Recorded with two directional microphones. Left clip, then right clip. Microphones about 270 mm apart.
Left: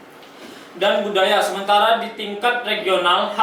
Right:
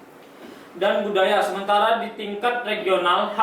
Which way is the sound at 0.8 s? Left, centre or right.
Centre.